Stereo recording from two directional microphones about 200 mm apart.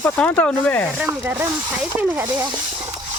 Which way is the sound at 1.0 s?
10° right (ahead or behind).